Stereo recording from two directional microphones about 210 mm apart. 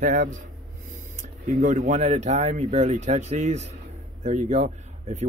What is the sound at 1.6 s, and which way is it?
Speech, 35° right (ahead or behind).